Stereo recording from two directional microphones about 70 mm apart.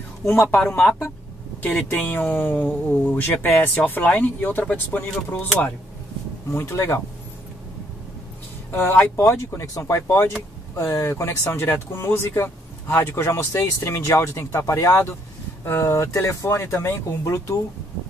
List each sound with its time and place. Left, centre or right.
0.2 s speech: left
1.6 s speech: left
6.5 s speech: left
8.7 s speech: left
17.2 s speech: left